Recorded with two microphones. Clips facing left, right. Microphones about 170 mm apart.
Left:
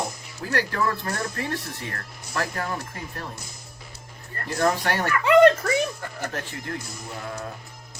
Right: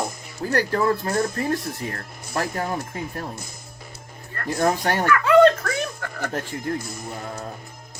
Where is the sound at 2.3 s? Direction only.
25° right (ahead or behind).